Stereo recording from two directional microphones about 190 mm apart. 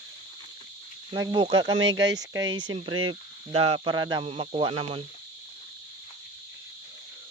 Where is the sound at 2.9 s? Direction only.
90° right.